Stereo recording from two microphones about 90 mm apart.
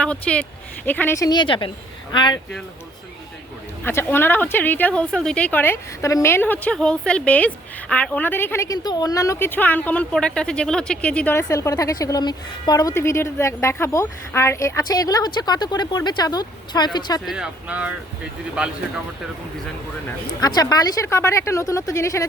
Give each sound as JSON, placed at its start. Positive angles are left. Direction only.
{"t": 0.0, "sound": "speech", "side_deg": 10}
{"t": 1.3, "sound": "a woman's voice", "side_deg": 65}
{"t": 3.8, "sound": "speech", "side_deg": 25}
{"t": 6.0, "sound": "speech", "side_deg": 35}
{"t": 6.7, "sound": "speech", "side_deg": 10}
{"t": 8.6, "sound": "a woman's voice", "side_deg": 45}
{"t": 9.4, "sound": "speech", "side_deg": 20}
{"t": 11.3, "sound": "speech", "side_deg": 35}
{"t": 12.9, "sound": "a woman's voice", "side_deg": 30}
{"t": 17.2, "sound": "speech", "side_deg": -10}
{"t": 20.4, "sound": "a woman's voice", "side_deg": 45}